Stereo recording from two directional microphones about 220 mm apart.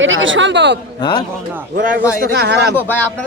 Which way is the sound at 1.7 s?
35° right (ahead or behind).